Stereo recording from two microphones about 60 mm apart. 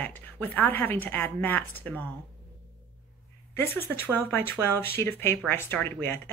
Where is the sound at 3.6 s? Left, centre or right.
Left.